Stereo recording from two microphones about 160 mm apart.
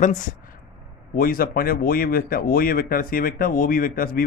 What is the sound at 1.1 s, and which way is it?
Speech, 65° left (ahead or behind).